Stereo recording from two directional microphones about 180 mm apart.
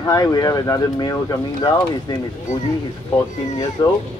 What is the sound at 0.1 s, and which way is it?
Speech, 20° left (ahead or behind).